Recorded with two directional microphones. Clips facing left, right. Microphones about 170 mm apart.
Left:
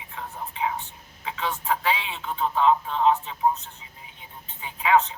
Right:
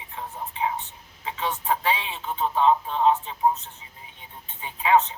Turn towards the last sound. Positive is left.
turn(degrees=-30)  # may be behind; listen again after turning